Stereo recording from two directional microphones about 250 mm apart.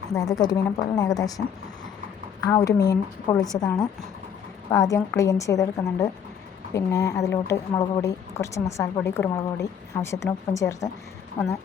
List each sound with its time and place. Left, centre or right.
0.1 s speech: centre
2.5 s speech: centre